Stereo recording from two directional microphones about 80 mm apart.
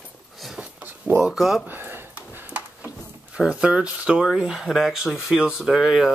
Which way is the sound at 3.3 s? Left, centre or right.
Centre.